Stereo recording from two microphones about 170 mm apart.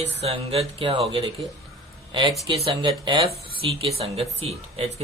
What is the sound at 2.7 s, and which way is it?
Speech, 30° right (ahead or behind).